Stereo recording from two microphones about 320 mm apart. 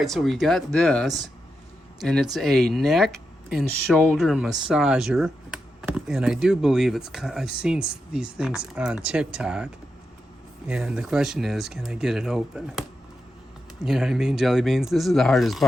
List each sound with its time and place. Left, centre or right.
0.0 s speech: centre
10.7 s speech: centre
13.8 s speech: centre